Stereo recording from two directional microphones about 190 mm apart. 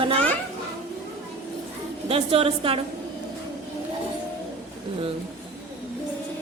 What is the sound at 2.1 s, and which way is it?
Speech, 30° right (ahead or behind).